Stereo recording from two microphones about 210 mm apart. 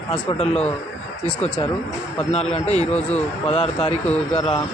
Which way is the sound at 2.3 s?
30° left (ahead or behind).